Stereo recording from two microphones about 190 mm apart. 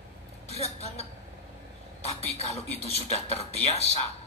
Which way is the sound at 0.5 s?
35° left (ahead or behind).